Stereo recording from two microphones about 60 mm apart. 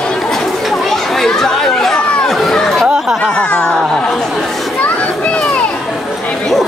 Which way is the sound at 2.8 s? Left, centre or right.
Centre.